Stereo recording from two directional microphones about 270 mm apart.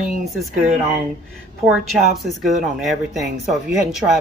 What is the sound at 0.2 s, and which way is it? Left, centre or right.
Speech, centre.